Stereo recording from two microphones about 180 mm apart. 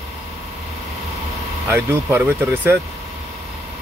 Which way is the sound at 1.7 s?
10° right (ahead or behind).